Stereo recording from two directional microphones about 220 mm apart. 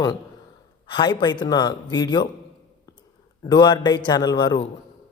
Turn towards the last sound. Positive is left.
turn(degrees=20)  # may be behind; listen again after turning